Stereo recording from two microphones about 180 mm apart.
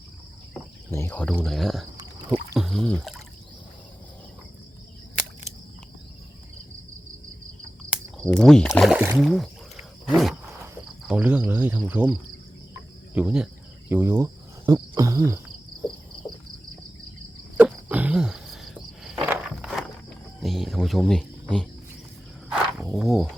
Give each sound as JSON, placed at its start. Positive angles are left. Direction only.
{"t": 0.9, "sound": "speech", "side_deg": 15}
{"t": 2.0, "sound": "rowboat", "side_deg": -20}
{"t": 2.6, "sound": "speech", "side_deg": 0}
{"t": 8.2, "sound": "speech", "side_deg": 5}
{"t": 8.8, "sound": "speech", "side_deg": -5}
{"t": 9.2, "sound": "a sound", "side_deg": 0}
{"t": 11.1, "sound": "speech", "side_deg": -5}
{"t": 13.1, "sound": "speech", "side_deg": -5}
{"t": 17.6, "sound": "a sound", "side_deg": -10}
{"t": 19.3, "sound": "walk", "side_deg": -5}
{"t": 20.4, "sound": "speech", "side_deg": 0}
{"t": 22.8, "sound": "speech", "side_deg": 0}